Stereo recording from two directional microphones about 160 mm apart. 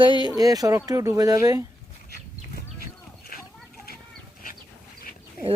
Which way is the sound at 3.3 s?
65° left (ahead or behind).